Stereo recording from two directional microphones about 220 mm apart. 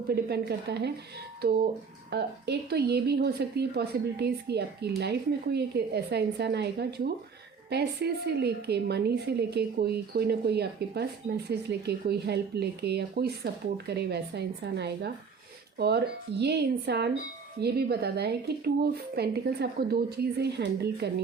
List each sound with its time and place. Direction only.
0.3 s a woman's voice: 50° right (ahead or behind)